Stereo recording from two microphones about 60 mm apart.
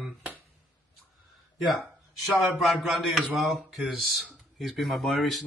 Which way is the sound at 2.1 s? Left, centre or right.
Centre.